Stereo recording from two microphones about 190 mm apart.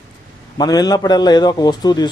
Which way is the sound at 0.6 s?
20° left (ahead or behind).